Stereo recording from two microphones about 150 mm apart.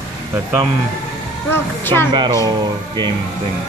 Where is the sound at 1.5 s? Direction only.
15° left (ahead or behind).